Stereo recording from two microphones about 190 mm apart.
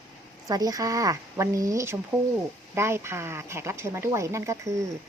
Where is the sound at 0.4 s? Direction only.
20° right (ahead or behind).